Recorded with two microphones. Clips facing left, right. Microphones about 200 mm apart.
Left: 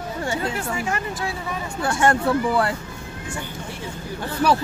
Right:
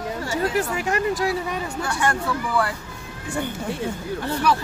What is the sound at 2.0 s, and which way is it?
Speech, 30° left (ahead or behind).